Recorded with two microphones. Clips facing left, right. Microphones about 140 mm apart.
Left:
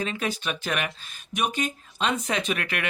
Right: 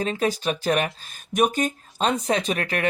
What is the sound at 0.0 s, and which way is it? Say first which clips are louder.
Speech: right 5 dB; 35° right (ahead or behind).